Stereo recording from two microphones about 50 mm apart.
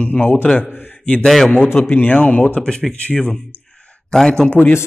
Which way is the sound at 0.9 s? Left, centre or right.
Left.